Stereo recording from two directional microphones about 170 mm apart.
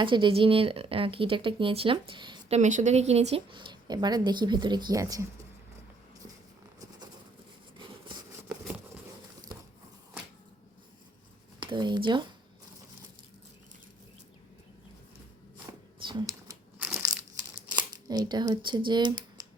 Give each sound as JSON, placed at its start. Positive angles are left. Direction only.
{"t": 0.0, "sound": "speech", "side_deg": -30}
{"t": 2.6, "sound": "a woman's voice", "side_deg": -45}
{"t": 7.8, "sound": "sawing", "side_deg": -30}
{"t": 11.6, "sound": "speech", "side_deg": -25}
{"t": 16.0, "sound": "crumpling", "side_deg": -25}
{"t": 18.9, "sound": "speech", "side_deg": -25}